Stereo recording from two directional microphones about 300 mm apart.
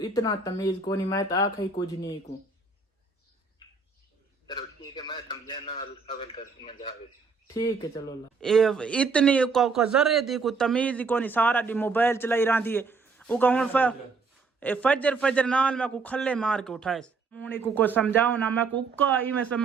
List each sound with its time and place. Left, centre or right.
0.0 s speech: centre
4.4 s a sound: centre
7.4 s a man's voice: centre